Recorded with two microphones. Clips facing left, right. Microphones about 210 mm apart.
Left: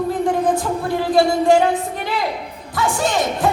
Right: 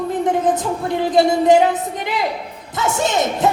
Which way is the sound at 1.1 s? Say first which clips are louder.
Right 1 dB; 20° right (ahead or behind).